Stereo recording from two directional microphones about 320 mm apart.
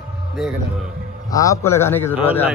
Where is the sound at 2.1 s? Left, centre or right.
Centre.